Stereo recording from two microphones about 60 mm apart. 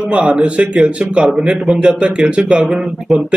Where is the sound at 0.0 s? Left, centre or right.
Centre.